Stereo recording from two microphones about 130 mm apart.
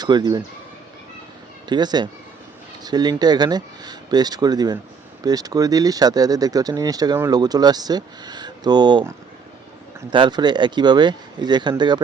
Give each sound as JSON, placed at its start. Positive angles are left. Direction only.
{"t": 0.0, "sound": "speech", "side_deg": -30}
{"t": 1.6, "sound": "speech", "side_deg": -35}
{"t": 10.1, "sound": "speech", "side_deg": -35}